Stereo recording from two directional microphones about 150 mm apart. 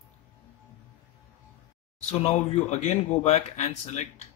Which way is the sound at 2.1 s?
50° left (ahead or behind).